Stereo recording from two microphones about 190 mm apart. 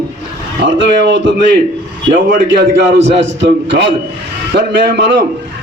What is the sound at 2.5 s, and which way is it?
A man's voice, 65° right (ahead or behind).